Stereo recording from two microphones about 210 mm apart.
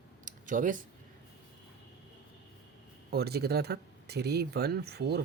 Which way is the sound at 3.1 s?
50° right (ahead or behind).